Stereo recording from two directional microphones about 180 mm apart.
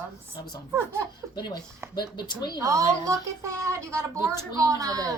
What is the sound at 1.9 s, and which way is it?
Speech, 25° left (ahead or behind).